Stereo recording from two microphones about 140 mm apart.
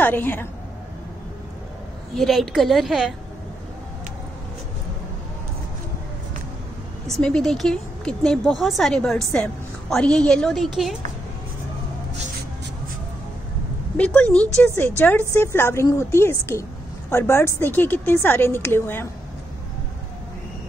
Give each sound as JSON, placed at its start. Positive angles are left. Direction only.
{"t": 0.0, "sound": "a woman's voice", "side_deg": 15}
{"t": 2.1, "sound": "speech", "side_deg": 0}
{"t": 7.1, "sound": "speech", "side_deg": 5}
{"t": 13.9, "sound": "a woman's voice", "side_deg": 10}